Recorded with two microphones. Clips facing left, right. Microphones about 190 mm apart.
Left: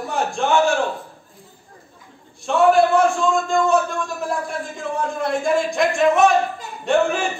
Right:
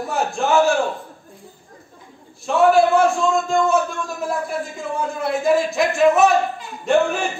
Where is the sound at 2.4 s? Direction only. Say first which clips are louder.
Even; centre (ahead or behind).